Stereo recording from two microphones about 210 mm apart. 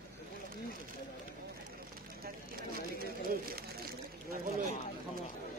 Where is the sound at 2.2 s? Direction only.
45° right (ahead or behind).